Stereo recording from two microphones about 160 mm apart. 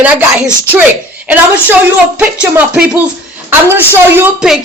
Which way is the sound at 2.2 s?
10° right (ahead or behind).